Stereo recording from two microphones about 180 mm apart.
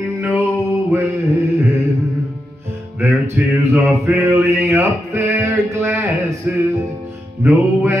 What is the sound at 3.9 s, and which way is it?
Mantra, centre (ahead or behind).